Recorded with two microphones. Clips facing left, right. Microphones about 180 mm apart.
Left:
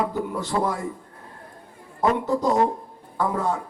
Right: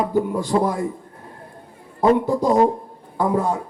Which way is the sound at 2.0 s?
15° right (ahead or behind).